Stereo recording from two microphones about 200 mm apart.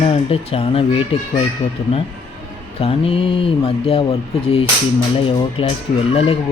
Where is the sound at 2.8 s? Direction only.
30° left (ahead or behind).